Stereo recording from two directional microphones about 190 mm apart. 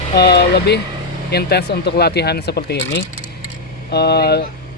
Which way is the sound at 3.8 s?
60° left (ahead or behind).